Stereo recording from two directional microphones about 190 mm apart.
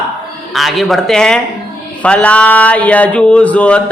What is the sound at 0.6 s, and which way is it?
Speech, centre (ahead or behind).